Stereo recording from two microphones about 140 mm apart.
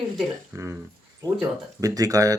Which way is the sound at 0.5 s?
25° right (ahead or behind).